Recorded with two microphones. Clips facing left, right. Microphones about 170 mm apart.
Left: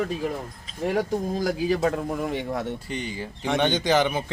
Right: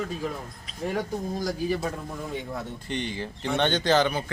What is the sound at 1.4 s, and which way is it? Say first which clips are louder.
A man's voice: left 5 dB; 90° left.